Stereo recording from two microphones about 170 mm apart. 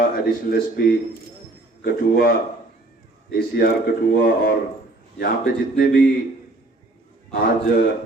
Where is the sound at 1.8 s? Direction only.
65° left (ahead or behind).